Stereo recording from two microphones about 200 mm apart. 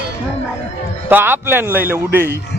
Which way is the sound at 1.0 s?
10° right (ahead or behind).